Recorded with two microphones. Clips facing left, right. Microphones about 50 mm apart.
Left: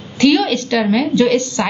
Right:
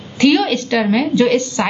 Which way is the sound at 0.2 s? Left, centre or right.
Centre.